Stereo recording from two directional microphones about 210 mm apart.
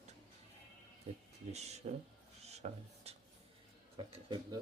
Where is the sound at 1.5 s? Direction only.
30° right (ahead or behind).